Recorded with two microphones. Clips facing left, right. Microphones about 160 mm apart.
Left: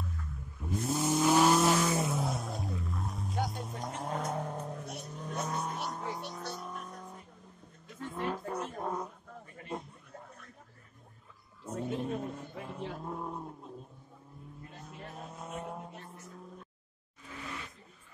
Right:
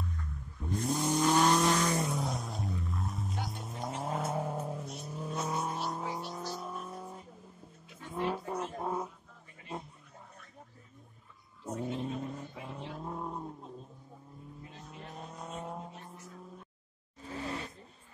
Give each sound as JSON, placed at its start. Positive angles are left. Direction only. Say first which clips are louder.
{"t": 0.0, "sound": "vehicle", "louder": "right 1 dB", "side_deg": 0}
{"t": 5.9, "sound": "music", "louder": "right 2 dB", "side_deg": -10}
{"t": 6.5, "sound": "vehicle", "louder": "right 2 dB", "side_deg": -5}
{"t": 8.1, "sound": "a sound", "louder": "right 2 dB", "side_deg": -5}
{"t": 11.6, "sound": "a sound", "louder": "left 1 dB", "side_deg": 0}
{"t": 13.0, "sound": "vehicle", "louder": "even", "side_deg": 0}
{"t": 14.9, "sound": "vehicle", "louder": "left 1 dB", "side_deg": 0}
{"t": 17.2, "sound": "roar", "louder": "right 5 dB", "side_deg": -35}